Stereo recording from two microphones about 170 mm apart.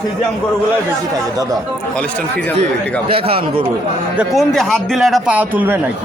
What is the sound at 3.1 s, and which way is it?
Speech, 30° right (ahead or behind).